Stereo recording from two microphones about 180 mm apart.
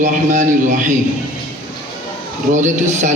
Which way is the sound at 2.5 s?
45° right (ahead or behind).